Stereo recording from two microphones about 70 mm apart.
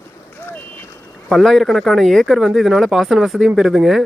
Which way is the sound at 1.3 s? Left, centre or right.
Centre.